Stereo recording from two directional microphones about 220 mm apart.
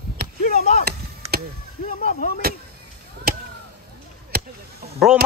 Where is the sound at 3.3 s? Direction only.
45° right (ahead or behind).